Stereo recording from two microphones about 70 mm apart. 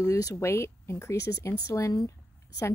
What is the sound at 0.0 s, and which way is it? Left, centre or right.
Speech, left.